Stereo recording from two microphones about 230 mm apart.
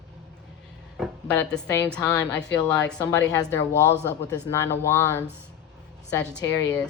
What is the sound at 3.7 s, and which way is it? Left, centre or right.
Speech, centre.